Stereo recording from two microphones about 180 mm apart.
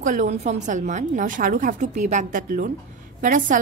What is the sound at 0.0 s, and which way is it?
A woman's voice, 45° right (ahead or behind).